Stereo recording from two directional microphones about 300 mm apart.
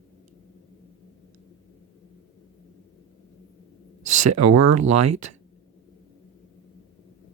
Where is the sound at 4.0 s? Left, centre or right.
Right.